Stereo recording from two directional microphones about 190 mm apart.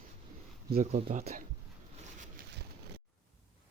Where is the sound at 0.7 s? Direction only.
50° right (ahead or behind).